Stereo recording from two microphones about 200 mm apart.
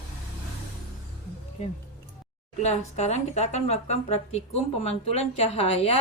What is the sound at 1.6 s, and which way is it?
Speech, 35° left (ahead or behind).